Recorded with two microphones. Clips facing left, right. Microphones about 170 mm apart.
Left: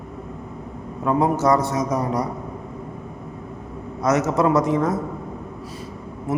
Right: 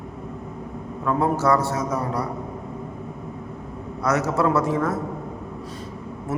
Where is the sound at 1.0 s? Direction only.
20° left (ahead or behind).